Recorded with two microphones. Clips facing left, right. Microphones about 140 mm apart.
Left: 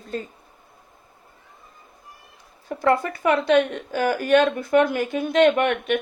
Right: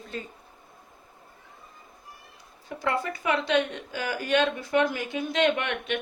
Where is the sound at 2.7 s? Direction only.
50° left (ahead or behind).